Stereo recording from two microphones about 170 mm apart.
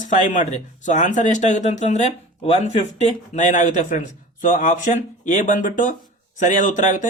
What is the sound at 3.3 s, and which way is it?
Speech, 45° left (ahead or behind).